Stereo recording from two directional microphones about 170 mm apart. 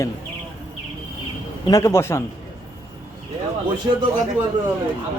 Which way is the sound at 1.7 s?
15° left (ahead or behind).